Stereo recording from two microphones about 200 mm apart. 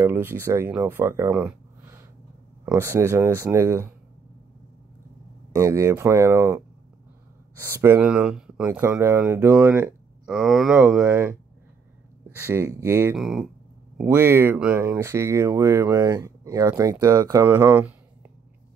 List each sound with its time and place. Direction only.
0.0 s speech: 10° right (ahead or behind)
5.5 s speech: 15° right (ahead or behind)
7.6 s speech: 10° right (ahead or behind)
12.4 s speech: 15° right (ahead or behind)
13.1 s speech: centre (ahead or behind)